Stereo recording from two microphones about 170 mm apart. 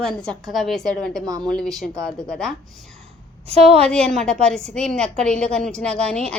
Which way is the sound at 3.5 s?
35° right (ahead or behind).